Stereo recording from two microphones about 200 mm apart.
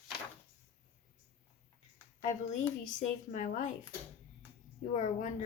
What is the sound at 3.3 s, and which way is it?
Speech, 40° left (ahead or behind).